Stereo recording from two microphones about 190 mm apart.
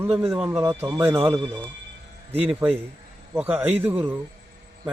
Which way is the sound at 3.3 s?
10° right (ahead or behind).